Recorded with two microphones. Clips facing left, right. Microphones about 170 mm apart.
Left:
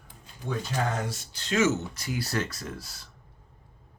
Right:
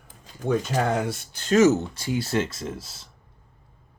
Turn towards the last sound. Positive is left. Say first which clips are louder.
# right 5 dB
turn(degrees=-25)  # may be behind; listen again after turning